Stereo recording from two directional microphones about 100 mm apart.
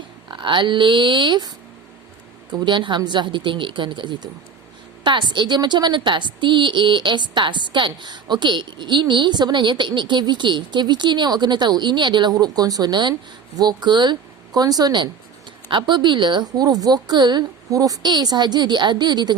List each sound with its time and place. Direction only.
0.3 s a woman's voice: 50° right (ahead or behind)
2.6 s a woman's voice: 50° right (ahead or behind)